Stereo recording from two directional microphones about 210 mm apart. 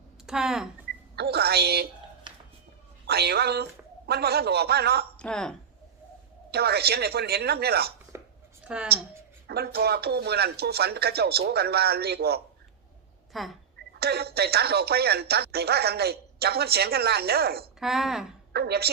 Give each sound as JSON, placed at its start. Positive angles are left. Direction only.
{"t": 0.3, "sound": "speech", "side_deg": 0}
{"t": 1.1, "sound": "speech", "side_deg": -50}
{"t": 3.1, "sound": "speech", "side_deg": -50}
{"t": 5.1, "sound": "a woman's voice", "side_deg": 5}
{"t": 6.5, "sound": "speech", "side_deg": -50}
{"t": 8.1, "sound": "a sound", "side_deg": -15}
{"t": 8.6, "sound": "a woman's voice", "side_deg": -5}
{"t": 9.5, "sound": "speech", "side_deg": -50}
{"t": 13.3, "sound": "speech", "side_deg": 0}
{"t": 13.9, "sound": "speech", "side_deg": -50}
{"t": 17.7, "sound": "speech", "side_deg": 0}
{"t": 18.5, "sound": "speech", "side_deg": -50}